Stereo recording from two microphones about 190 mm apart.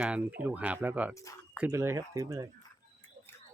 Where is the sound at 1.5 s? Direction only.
10° right (ahead or behind).